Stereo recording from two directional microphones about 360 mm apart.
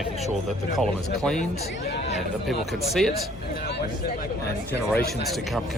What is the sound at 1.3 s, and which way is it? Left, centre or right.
Speech, left.